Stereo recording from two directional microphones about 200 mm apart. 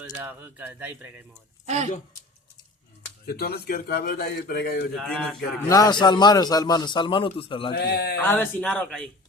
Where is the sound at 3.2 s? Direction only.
50° left (ahead or behind).